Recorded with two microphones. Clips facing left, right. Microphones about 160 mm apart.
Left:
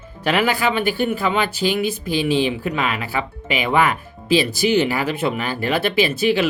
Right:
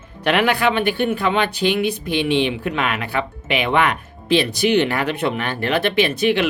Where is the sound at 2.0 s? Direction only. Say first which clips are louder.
Even; 65° right (ahead or behind).